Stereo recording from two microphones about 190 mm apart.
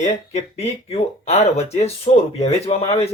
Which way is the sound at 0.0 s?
35° left (ahead or behind).